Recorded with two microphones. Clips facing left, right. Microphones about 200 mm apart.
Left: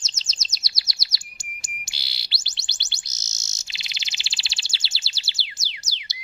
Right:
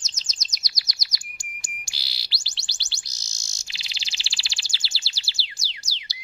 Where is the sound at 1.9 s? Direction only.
25° left (ahead or behind).